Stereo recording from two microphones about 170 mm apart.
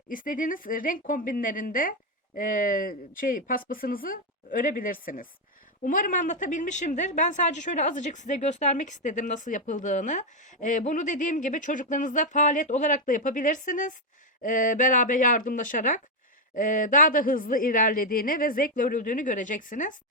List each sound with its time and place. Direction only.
0.1 s a woman's voice: 55° left (ahead or behind)